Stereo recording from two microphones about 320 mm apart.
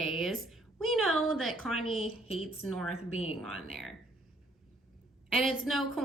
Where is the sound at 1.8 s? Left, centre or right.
Left.